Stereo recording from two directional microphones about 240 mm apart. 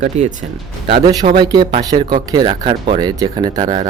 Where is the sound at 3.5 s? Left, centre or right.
Right.